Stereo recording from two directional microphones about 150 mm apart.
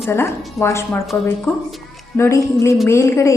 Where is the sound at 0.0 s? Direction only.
15° left (ahead or behind).